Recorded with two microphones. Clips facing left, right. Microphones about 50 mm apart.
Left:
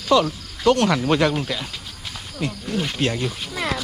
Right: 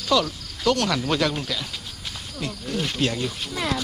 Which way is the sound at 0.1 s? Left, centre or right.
Left.